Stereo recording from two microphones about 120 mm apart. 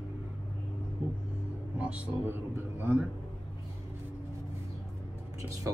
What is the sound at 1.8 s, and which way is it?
A man's voice, 10° right (ahead or behind).